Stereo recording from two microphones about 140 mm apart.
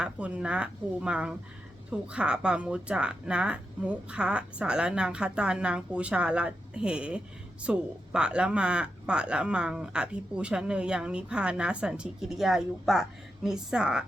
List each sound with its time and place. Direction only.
0.0 s speech: 10° right (ahead or behind)